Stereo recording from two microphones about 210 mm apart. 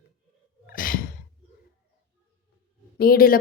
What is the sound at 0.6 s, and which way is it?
Sigh, 40° left (ahead or behind).